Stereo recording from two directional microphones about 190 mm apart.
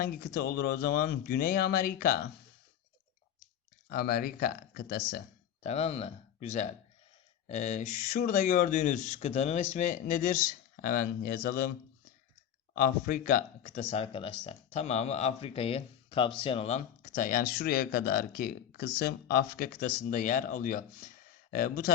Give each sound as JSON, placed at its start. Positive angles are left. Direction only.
{"t": 0.0, "sound": "speech", "side_deg": 55}
{"t": 3.8, "sound": "speech", "side_deg": 55}
{"t": 5.6, "sound": "speech", "side_deg": 35}
{"t": 12.7, "sound": "speech", "side_deg": 50}